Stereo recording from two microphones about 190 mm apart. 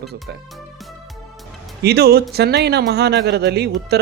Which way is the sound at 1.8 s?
55° right (ahead or behind).